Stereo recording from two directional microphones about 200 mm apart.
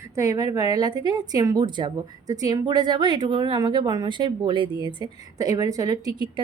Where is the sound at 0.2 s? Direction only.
15° right (ahead or behind).